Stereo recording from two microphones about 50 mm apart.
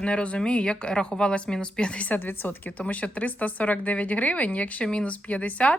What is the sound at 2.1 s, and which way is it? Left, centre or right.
Speech, left.